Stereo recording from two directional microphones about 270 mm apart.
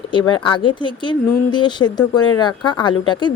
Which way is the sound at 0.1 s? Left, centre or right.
Centre.